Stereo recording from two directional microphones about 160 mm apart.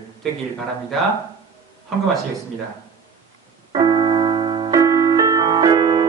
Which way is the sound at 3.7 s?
25° right (ahead or behind).